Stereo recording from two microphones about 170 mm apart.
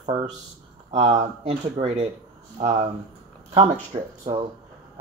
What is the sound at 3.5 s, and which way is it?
Speech, 40° right (ahead or behind).